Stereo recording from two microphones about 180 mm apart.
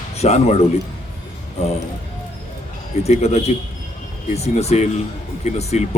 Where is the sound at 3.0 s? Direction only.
35° left (ahead or behind).